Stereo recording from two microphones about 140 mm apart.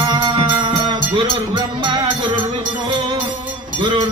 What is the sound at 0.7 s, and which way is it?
Music, 35° right (ahead or behind).